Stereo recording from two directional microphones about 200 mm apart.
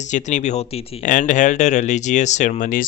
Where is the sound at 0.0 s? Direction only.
35° left (ahead or behind).